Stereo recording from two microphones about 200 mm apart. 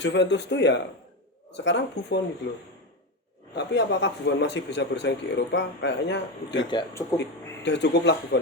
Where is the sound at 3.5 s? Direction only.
60° left (ahead or behind).